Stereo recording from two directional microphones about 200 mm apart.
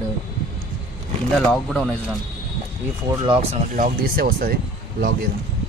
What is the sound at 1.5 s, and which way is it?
Speech, 5° left (ahead or behind).